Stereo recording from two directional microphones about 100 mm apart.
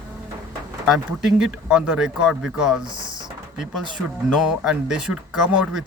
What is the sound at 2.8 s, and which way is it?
Speech, 50° right (ahead or behind).